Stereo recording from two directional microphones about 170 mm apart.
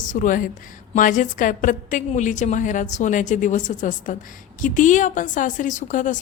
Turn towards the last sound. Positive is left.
turn(degrees=50)  # may be behind; listen again after turning